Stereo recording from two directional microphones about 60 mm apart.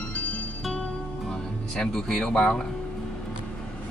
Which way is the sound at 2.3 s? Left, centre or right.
Centre.